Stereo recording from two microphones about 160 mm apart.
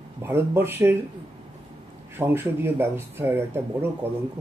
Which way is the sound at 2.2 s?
15° right (ahead or behind).